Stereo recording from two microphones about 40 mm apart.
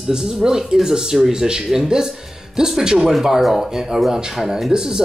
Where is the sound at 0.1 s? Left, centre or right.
Centre.